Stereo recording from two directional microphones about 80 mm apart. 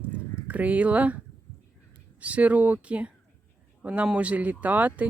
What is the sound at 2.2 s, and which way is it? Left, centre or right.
Speech, centre.